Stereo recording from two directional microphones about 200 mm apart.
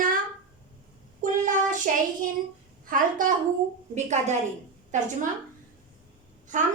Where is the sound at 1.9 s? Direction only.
40° right (ahead or behind).